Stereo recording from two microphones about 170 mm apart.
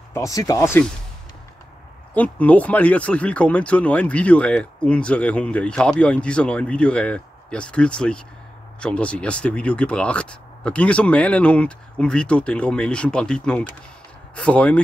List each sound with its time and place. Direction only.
0.1 s speech: 20° left (ahead or behind)
2.1 s speech: 10° left (ahead or behind)